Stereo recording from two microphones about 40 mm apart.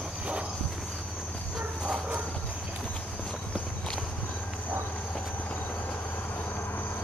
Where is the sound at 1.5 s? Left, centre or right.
Centre.